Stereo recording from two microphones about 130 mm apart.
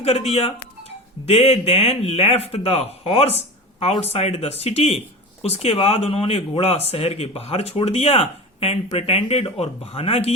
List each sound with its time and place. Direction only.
0.0 s speech: 50° left (ahead or behind)